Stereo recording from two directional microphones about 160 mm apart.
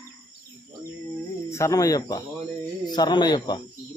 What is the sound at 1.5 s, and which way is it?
Speech, 20° left (ahead or behind).